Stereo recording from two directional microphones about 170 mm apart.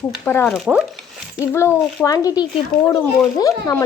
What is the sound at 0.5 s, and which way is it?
Speech, 5° right (ahead or behind).